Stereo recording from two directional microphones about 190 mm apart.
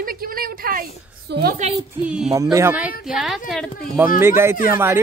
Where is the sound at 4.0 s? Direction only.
15° right (ahead or behind).